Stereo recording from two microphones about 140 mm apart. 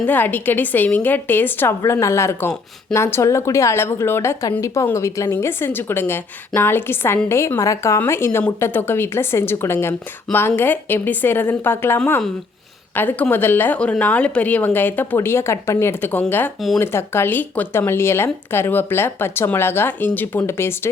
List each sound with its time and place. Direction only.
0.0 s a woman's voice: 10° left (ahead or behind)